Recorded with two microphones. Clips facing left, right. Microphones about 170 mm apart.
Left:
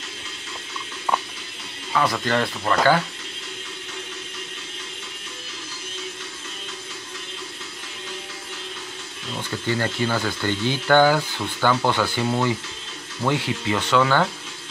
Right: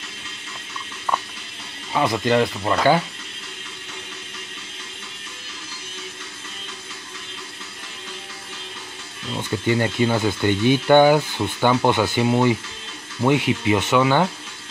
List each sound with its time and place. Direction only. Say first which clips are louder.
1.9 s speech: right 3 dB; 20° right (ahead or behind)
9.4 s speech: right 4 dB; 15° right (ahead or behind)